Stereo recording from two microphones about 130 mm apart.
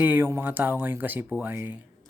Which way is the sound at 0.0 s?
15° right (ahead or behind).